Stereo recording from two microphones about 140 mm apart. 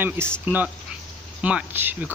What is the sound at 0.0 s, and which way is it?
Speech, 15° right (ahead or behind).